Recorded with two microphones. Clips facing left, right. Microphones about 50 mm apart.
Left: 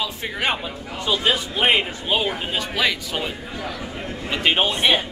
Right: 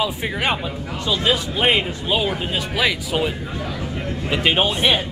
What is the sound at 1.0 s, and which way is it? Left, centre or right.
Speech, centre.